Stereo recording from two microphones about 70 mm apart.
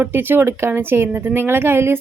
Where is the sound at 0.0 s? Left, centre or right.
Right.